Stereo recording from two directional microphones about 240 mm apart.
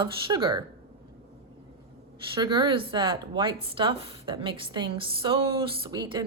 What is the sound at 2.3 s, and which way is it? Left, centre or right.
Speech, centre.